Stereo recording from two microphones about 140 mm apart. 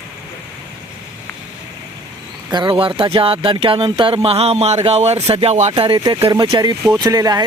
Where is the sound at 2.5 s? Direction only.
35° right (ahead or behind); by 5.7 s 50° right (ahead or behind).